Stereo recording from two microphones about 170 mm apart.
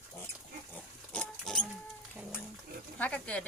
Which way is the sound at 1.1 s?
5° left (ahead or behind).